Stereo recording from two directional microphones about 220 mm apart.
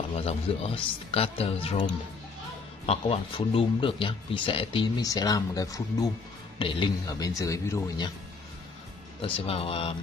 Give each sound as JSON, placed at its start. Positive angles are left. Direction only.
{"t": 0.2, "sound": "speech", "side_deg": 25}
{"t": 2.9, "sound": "a man's voice", "side_deg": 25}
{"t": 9.2, "sound": "speech", "side_deg": 25}